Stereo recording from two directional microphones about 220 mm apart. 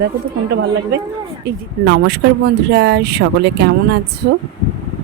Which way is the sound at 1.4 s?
50° right (ahead or behind).